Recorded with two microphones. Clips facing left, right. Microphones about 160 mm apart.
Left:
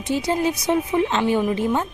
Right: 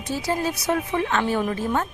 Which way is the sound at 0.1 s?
20° left (ahead or behind).